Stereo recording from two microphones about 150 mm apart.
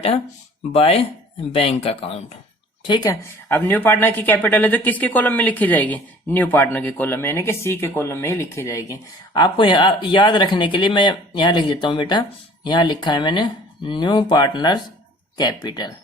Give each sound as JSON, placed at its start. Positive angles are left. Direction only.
{"t": 0.7, "sound": "speech", "side_deg": 40}
{"t": 2.8, "sound": "a woman's voice", "side_deg": 25}
{"t": 3.5, "sound": "a woman's voice", "side_deg": 15}